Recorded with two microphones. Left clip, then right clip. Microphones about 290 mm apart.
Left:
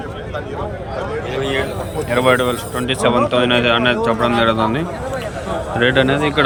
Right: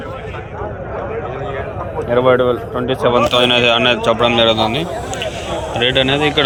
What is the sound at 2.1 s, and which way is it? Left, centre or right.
Speech, centre.